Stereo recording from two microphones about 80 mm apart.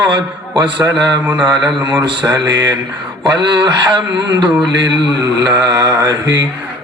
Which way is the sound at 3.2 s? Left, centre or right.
Right.